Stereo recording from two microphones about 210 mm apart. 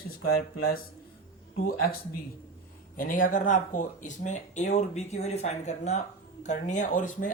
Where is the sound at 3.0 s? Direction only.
40° left (ahead or behind).